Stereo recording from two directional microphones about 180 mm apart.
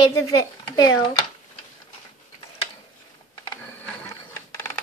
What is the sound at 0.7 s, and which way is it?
Speech, 25° left (ahead or behind).